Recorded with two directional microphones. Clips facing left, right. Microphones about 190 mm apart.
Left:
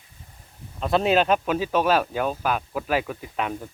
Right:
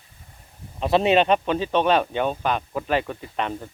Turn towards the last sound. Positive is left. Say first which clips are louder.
# right 1 dB
turn(degrees=5)  # may be behind; listen again after turning